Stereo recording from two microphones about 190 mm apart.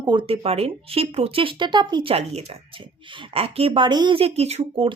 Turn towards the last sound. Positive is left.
turn(degrees=-35)  # may be behind; listen again after turning